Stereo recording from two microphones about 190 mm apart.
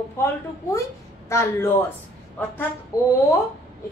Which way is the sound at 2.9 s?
20° left (ahead or behind).